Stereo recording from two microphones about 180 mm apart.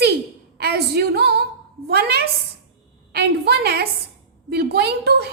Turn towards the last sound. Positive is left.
turn(degrees=-65)  # may be behind; listen again after turning